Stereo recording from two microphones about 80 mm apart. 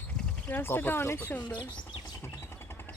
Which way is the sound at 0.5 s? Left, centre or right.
Left.